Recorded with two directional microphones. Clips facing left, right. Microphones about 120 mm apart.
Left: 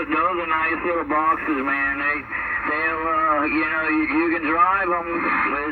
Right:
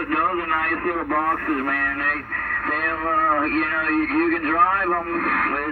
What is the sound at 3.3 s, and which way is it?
Speech, 50° left (ahead or behind).